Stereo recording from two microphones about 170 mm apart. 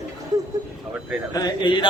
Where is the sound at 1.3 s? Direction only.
25° left (ahead or behind).